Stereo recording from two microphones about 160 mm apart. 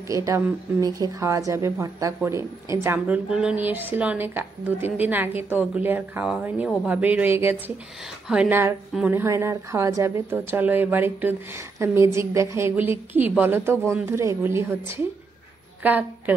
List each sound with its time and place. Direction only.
0.1 s a woman's voice: 20° right (ahead or behind)